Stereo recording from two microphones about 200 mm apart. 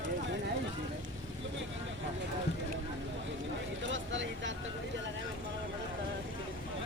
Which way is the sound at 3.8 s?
70° right (ahead or behind).